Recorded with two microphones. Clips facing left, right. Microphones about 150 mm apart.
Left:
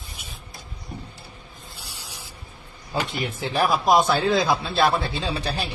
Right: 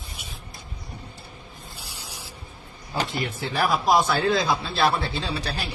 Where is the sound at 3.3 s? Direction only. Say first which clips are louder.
Left 2 dB; 20° left (ahead or behind).